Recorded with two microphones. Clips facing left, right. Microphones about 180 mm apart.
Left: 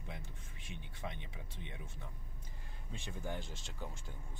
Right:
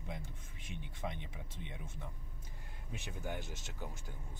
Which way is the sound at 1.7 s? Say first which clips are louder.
Right 2 dB; 20° right (ahead or behind).